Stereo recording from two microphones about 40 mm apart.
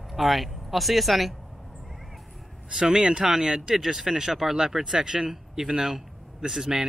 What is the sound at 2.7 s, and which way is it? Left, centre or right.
Speech, right.